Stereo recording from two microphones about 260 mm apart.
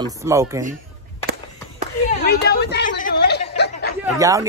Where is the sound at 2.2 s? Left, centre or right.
Left.